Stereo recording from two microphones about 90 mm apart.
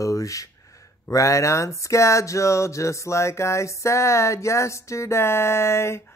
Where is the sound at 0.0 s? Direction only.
40° left (ahead or behind).